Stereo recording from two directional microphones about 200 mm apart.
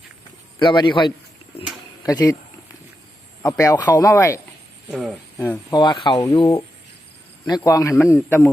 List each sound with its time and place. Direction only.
0.6 s a man's voice: 25° left (ahead or behind)
3.4 s a man's voice: 15° left (ahead or behind)
4.9 s speech: centre (ahead or behind)
5.4 s a man's voice: 10° left (ahead or behind)
5.8 s a man's voice: 25° left (ahead or behind)